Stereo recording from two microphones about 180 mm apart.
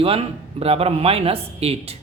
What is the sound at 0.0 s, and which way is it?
A woman's voice, 30° right (ahead or behind).